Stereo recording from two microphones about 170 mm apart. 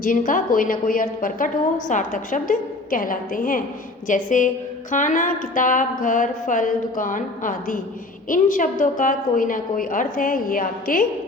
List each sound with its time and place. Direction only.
0.0 s a woman's voice: 50° left (ahead or behind)